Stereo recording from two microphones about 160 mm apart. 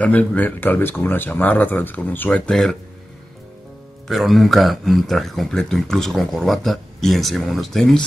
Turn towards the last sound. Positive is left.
turn(degrees=0)  # may be behind; listen again after turning